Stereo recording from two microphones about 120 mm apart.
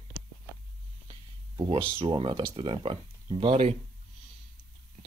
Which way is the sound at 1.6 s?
50° right (ahead or behind).